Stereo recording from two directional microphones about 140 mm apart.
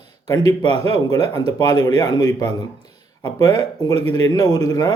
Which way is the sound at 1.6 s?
30° left (ahead or behind).